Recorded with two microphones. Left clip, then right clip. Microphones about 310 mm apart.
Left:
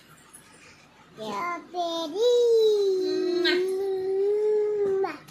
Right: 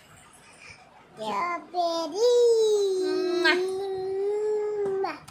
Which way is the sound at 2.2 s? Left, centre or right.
Centre.